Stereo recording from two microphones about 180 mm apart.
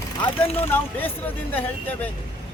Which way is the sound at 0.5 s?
10° left (ahead or behind).